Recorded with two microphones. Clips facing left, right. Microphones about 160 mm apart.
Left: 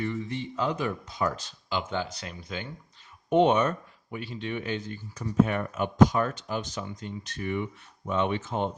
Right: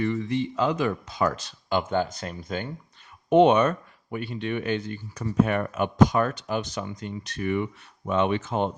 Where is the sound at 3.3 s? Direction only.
80° right.